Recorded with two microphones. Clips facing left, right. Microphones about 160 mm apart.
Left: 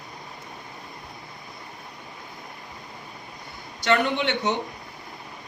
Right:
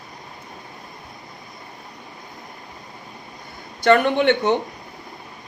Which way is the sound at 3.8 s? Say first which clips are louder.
Right 7 dB; 50° right (ahead or behind).